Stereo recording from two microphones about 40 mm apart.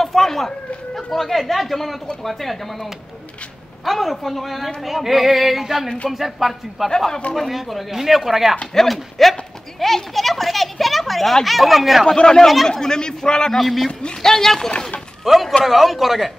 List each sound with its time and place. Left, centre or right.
0.0 s a sound: centre
0.9 s speech: centre
12.1 s a man's voice: centre
13.5 s a man's voice: centre
15.3 s speech: centre